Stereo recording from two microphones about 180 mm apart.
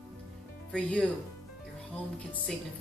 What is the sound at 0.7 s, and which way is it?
Speech, 5° left (ahead or behind).